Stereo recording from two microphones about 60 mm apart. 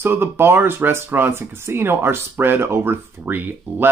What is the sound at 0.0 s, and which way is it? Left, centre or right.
Speech, right.